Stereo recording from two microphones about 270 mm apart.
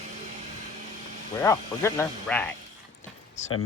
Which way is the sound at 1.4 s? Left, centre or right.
Centre.